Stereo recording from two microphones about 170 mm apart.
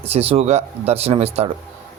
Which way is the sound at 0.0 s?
35° right (ahead or behind).